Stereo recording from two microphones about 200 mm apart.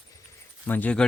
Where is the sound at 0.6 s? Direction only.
10° left (ahead or behind).